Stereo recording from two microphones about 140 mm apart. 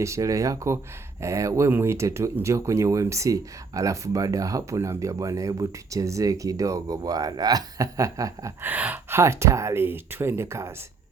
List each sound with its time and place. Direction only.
0.0 s speech: 20° right (ahead or behind)
8.6 s speech: 10° right (ahead or behind)